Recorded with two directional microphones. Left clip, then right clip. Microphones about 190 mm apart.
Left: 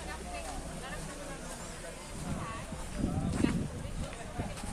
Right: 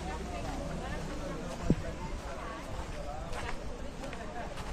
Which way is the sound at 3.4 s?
65° left (ahead or behind).